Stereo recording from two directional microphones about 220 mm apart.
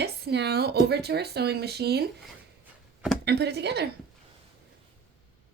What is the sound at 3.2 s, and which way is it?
Speech, 50° right (ahead or behind).